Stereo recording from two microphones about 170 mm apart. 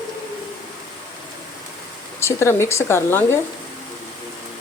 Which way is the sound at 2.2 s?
15° left (ahead or behind).